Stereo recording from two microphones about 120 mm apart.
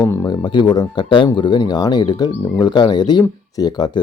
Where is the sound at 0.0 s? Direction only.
25° left (ahead or behind).